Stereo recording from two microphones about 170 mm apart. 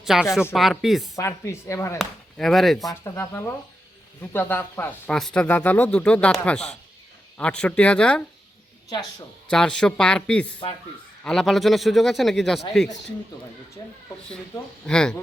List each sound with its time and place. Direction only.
0.0 s speech: centre (ahead or behind)
1.1 s speech: 15° left (ahead or behind)
2.0 s speech: centre (ahead or behind)
2.8 s speech: 15° left (ahead or behind)
8.9 s speech: 20° left (ahead or behind)
9.5 s speech: 5° left (ahead or behind)
14.8 s speech: 5° left (ahead or behind)